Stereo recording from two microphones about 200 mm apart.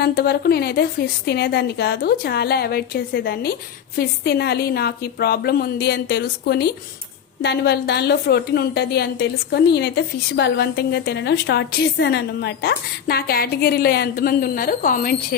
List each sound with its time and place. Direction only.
0.0 s a woman's voice: 55° left (ahead or behind)